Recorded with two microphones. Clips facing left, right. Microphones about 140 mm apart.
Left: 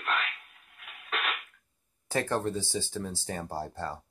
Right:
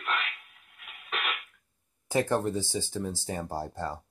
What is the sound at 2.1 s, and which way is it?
Speech, 15° right (ahead or behind).